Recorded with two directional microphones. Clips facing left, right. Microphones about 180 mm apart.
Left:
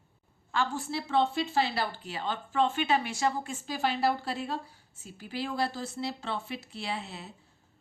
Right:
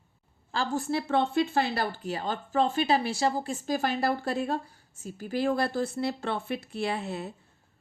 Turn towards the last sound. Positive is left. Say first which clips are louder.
# right 6 dB
turn(degrees=-50)  # may be behind; listen again after turning